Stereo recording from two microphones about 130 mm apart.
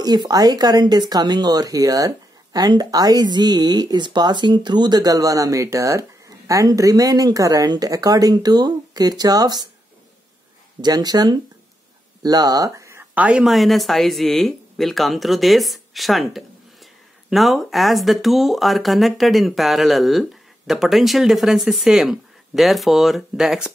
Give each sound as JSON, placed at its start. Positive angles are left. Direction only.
{"t": 0.0, "sound": "speech", "side_deg": -30}
{"t": 10.8, "sound": "speech", "side_deg": -30}
{"t": 13.1, "sound": "speech", "side_deg": -10}